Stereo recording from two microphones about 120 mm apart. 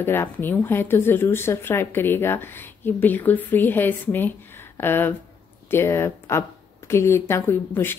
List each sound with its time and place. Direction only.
0.0 s speech: 20° left (ahead or behind)